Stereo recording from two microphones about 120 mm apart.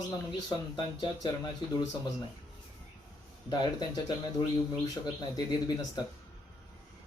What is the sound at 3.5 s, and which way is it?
Speech, 35° left (ahead or behind).